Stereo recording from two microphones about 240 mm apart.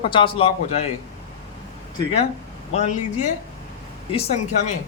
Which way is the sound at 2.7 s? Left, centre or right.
Left.